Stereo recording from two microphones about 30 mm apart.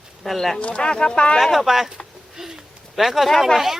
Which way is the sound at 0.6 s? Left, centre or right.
Left.